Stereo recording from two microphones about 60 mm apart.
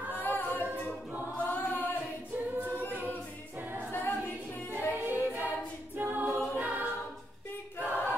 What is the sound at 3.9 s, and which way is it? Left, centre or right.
A capella, left.